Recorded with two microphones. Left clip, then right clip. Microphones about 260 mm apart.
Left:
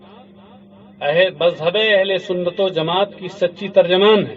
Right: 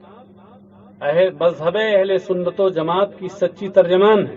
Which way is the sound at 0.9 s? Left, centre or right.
Left.